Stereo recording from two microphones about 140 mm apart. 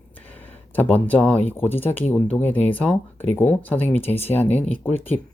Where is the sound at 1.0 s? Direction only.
10° left (ahead or behind).